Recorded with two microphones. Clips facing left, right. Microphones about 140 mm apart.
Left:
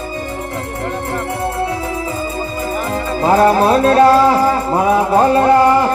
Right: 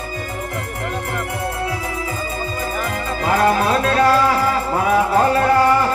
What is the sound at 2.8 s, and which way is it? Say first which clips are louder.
Music: left 6 dB; 30° left (ahead or behind).